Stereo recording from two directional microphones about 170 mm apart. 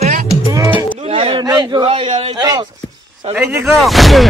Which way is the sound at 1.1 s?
30° right (ahead or behind).